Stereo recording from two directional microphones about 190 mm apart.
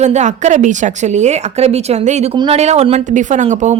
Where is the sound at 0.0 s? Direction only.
35° right (ahead or behind).